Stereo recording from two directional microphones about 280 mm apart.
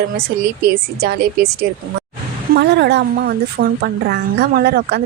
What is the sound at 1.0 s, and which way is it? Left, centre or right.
Speech, right.